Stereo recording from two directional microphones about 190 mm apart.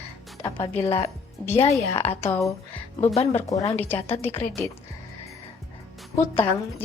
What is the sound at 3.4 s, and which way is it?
Speech, 15° left (ahead or behind).